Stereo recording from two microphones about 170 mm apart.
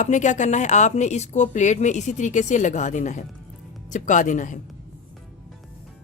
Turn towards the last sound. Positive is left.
turn(degrees=50)  # may be behind; listen again after turning